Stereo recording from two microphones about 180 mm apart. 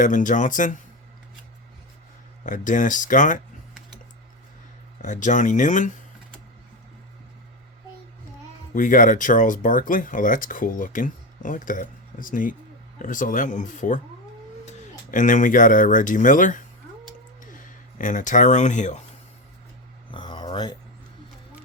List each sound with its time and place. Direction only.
0.0 s speech: 45° left (ahead or behind)
2.4 s speech: 45° left (ahead or behind)
5.0 s speech: 45° left (ahead or behind)
8.7 s speech: 45° left (ahead or behind)
20.1 s a sound: 25° left (ahead or behind)